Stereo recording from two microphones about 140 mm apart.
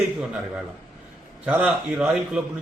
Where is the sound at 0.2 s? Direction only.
5° right (ahead or behind).